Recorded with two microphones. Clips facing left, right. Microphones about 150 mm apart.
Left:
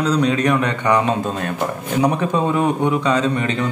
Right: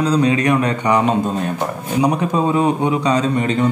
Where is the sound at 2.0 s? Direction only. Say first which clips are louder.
Right 1 dB; 15° right (ahead or behind).